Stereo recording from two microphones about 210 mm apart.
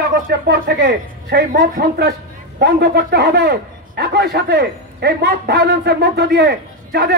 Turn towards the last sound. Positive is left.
turn(degrees=-50)  # may be behind; listen again after turning